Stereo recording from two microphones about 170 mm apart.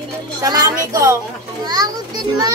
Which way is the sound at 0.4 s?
20° right (ahead or behind).